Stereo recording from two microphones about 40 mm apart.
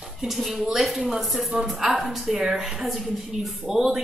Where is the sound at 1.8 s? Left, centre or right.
Right.